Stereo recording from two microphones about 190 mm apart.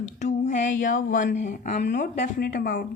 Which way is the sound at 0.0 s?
40° left (ahead or behind).